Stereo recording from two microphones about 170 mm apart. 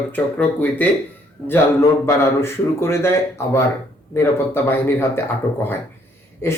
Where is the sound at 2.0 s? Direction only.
15° left (ahead or behind).